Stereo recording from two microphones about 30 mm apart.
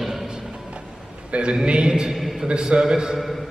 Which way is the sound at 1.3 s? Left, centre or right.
Right.